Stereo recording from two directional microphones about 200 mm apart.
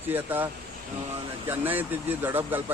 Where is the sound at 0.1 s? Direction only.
10° right (ahead or behind).